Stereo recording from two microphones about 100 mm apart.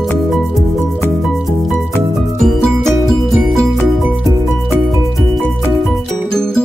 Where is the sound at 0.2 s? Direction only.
Centre (ahead or behind).